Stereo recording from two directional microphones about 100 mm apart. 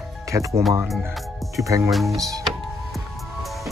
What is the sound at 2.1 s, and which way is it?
Speech, 35° right (ahead or behind).